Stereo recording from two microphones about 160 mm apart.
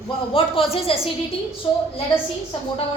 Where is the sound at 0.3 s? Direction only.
35° left (ahead or behind).